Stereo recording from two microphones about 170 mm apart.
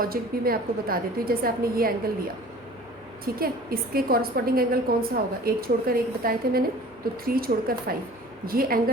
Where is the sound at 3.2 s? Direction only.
60° right (ahead or behind).